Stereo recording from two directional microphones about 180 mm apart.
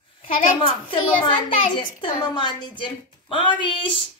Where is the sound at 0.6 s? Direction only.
30° left (ahead or behind).